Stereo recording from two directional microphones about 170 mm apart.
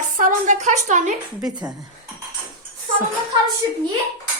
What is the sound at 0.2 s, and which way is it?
Speech, 50° right (ahead or behind).